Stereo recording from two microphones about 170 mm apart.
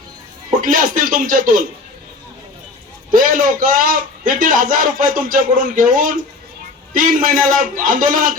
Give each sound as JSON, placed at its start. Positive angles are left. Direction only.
{"t": 0.6, "sound": "a man's voice", "side_deg": -55}
{"t": 3.1, "sound": "a man's voice", "side_deg": -55}